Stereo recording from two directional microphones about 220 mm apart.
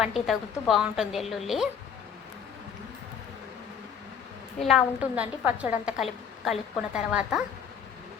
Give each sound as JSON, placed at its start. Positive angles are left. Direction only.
{"t": 0.0, "sound": "a woman's voice", "side_deg": 0}
{"t": 4.6, "sound": "a woman's voice", "side_deg": -5}